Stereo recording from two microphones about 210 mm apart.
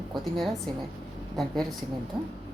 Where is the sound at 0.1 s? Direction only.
Centre (ahead or behind).